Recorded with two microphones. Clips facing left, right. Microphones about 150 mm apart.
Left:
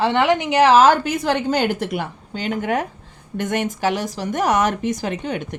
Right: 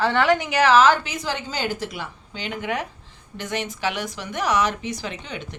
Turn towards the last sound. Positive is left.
turn(degrees=50)  # may be behind; listen again after turning